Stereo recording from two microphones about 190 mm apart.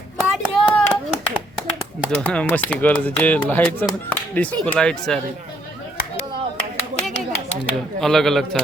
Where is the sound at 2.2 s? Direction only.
5° left (ahead or behind).